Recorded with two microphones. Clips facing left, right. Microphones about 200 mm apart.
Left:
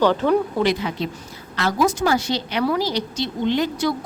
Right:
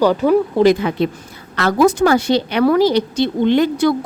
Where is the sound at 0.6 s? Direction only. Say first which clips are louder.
Right 8 dB; 50° right (ahead or behind).